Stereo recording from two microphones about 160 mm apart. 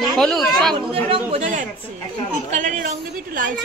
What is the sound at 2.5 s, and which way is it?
Speech, 55° right (ahead or behind).